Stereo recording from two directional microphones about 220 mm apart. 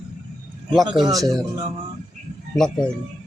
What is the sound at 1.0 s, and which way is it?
Speech, 15° right (ahead or behind).